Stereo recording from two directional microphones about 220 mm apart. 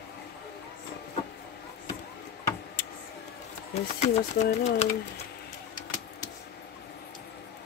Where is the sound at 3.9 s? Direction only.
30° left (ahead or behind).